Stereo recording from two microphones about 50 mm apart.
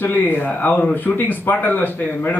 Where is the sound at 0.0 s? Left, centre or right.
Left.